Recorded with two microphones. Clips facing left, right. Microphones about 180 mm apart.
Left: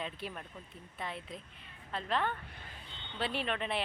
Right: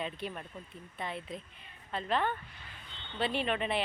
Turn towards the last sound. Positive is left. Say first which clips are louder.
# right 3 dB
turn(degrees=0)  # may be behind; listen again after turning